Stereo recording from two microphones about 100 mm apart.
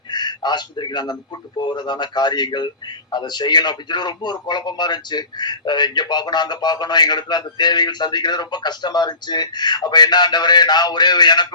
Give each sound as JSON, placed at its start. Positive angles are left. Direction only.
{"t": 0.1, "sound": "a man's voice", "side_deg": 45}